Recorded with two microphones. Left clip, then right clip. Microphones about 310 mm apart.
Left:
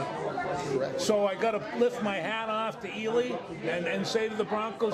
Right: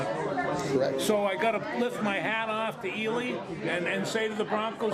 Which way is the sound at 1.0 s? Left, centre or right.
Left.